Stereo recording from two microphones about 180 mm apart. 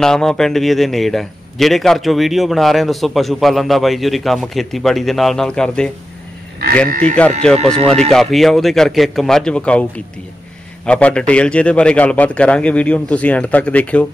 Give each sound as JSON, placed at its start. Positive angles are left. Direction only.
{"t": 0.0, "sound": "a man's voice", "side_deg": 5}
{"t": 7.2, "sound": "a man's voice", "side_deg": 5}
{"t": 7.5, "sound": "speech", "side_deg": -30}
{"t": 8.1, "sound": "a man's voice", "side_deg": 0}
{"t": 10.9, "sound": "a man's voice", "side_deg": 5}